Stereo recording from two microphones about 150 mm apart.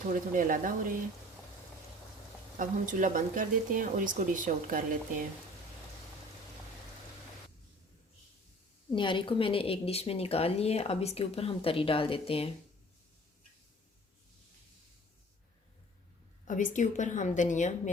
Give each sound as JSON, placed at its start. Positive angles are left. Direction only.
{"t": 0.1, "sound": "speech", "side_deg": -65}
{"t": 2.6, "sound": "speech", "side_deg": -60}
{"t": 8.9, "sound": "speech", "side_deg": 35}
{"t": 16.5, "sound": "a woman's voice", "side_deg": 60}